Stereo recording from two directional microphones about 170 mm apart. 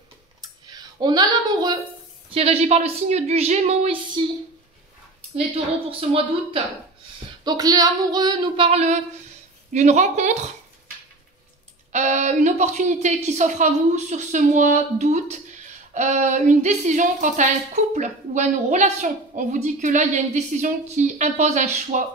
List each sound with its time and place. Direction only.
0.4 s a sound: 25° right (ahead or behind)
2.3 s a woman's voice: 35° right (ahead or behind)
5.3 s a woman's voice: 35° right (ahead or behind)
7.4 s a woman's voice: 20° right (ahead or behind); by 10.5 s 45° right (ahead or behind)
11.9 s a woman's voice: 45° right (ahead or behind)